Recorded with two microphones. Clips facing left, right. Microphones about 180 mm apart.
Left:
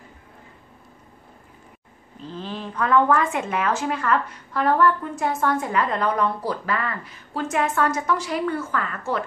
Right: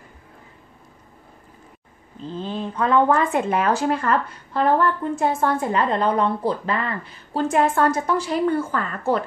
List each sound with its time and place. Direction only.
2.4 s speech: 25° right (ahead or behind)